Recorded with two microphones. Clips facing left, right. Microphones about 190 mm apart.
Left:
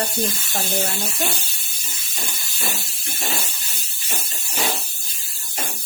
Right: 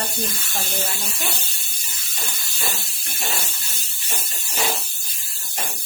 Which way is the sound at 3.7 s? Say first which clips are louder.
Left 1 dB; 10° left (ahead or behind).